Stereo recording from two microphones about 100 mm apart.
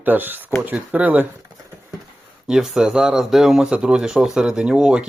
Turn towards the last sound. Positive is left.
turn(degrees=-5)  # may be behind; listen again after turning